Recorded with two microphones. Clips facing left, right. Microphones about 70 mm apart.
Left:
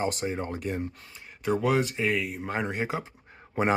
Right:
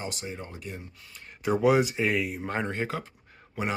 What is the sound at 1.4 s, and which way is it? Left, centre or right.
Speech, centre.